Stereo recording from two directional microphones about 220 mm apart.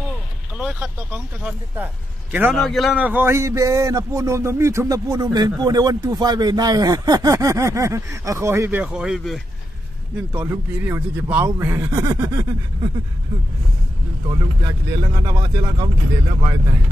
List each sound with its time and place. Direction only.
0.6 s a man's voice: 5° right (ahead or behind)
10.3 s a man's voice: 15° right (ahead or behind)
14.2 s a man's voice: 20° right (ahead or behind)